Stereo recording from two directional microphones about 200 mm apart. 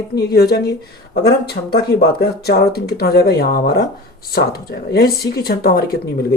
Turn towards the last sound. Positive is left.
turn(degrees=50)  # may be behind; listen again after turning